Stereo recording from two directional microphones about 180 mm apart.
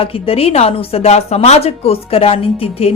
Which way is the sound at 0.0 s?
30° left (ahead or behind).